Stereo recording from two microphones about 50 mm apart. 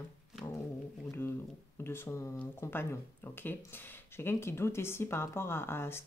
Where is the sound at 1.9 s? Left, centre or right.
Left.